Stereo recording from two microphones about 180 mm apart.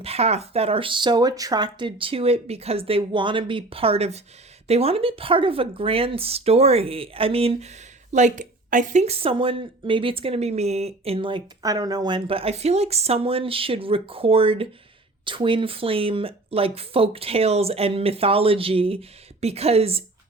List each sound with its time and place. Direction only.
0.0 s speech: 35° right (ahead or behind)